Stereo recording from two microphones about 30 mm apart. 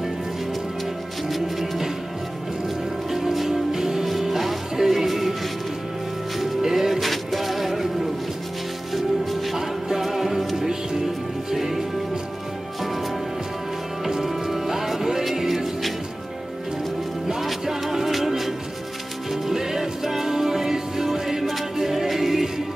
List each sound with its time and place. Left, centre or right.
1.3 s music: centre
3.1 s music: centre
4.0 s music: centre
6.4 s music: centre
14.0 s music: centre
17.4 s music: centre